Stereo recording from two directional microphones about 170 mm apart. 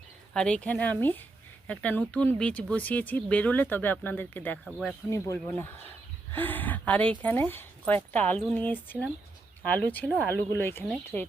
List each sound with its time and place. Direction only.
0.3 s speech: 5° left (ahead or behind)
5.1 s speech: 15° left (ahead or behind)